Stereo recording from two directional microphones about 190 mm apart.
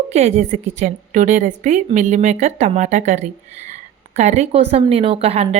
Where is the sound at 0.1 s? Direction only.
35° right (ahead or behind).